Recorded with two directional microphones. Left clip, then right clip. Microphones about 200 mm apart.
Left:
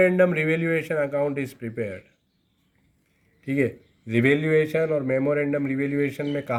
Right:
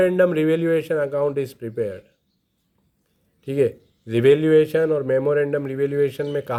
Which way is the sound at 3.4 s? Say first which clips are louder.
Right 4 dB; 40° right (ahead or behind).